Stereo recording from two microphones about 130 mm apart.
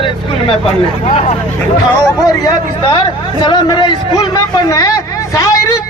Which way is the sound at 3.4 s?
35° left (ahead or behind).